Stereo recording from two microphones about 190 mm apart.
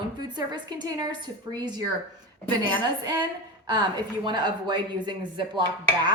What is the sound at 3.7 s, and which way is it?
A woman's voice, 25° right (ahead or behind).